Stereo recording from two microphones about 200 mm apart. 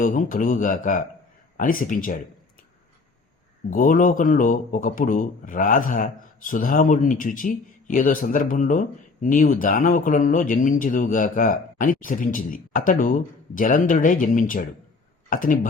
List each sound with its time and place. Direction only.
0.0 s speech: 40° left (ahead or behind)
3.7 s speech: 40° left (ahead or behind)